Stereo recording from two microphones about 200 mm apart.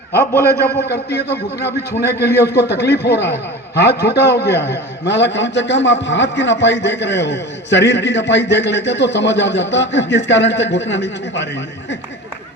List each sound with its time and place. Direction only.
0.2 s a man's voice: 10° left (ahead or behind)
0.8 s a man's voice: 55° left (ahead or behind)